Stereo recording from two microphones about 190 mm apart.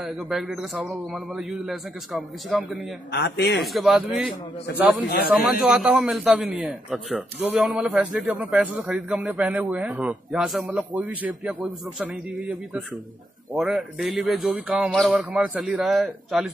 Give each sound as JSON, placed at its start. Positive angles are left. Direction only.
{"t": 0.0, "sound": "a man's voice", "side_deg": 0}
{"t": 3.1, "sound": "a man's voice", "side_deg": 60}
{"t": 3.5, "sound": "a man's voice", "side_deg": 0}
{"t": 5.3, "sound": "a man's voice", "side_deg": 0}